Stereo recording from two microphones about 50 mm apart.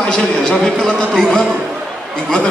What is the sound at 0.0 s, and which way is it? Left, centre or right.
A man's voice, centre.